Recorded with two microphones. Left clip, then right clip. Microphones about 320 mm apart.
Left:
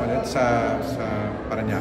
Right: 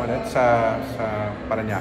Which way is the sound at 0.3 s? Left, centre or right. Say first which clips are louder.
Right 5 dB; centre.